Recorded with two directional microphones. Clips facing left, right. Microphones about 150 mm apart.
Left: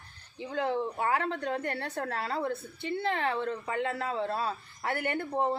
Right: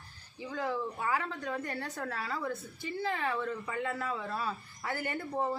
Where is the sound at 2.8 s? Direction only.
70° left (ahead or behind).